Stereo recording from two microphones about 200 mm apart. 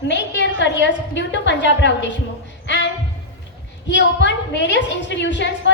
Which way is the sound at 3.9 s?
60° left (ahead or behind).